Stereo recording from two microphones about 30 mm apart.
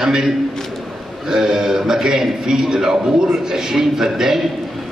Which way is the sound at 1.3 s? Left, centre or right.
Right.